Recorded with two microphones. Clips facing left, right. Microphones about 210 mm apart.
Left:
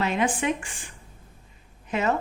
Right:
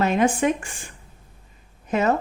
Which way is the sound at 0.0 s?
45° right (ahead or behind).